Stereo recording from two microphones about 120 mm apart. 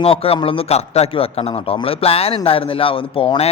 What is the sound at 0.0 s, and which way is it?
A man's voice, 50° left (ahead or behind).